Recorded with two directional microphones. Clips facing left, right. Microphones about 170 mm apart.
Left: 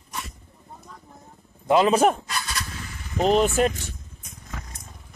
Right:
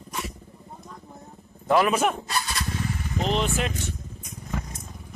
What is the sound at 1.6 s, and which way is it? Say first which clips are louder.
Speech: left 2 dB; 20° left (ahead or behind).